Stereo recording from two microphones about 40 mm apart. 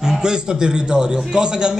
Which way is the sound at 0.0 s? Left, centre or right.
Centre.